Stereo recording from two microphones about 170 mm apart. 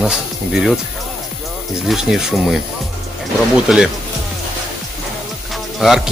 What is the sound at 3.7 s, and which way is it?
Speech, centre (ahead or behind).